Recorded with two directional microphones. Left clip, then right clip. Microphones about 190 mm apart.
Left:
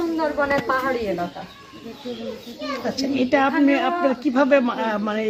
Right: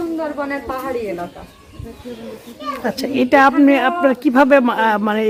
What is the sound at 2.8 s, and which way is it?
Speech, 45° right (ahead or behind).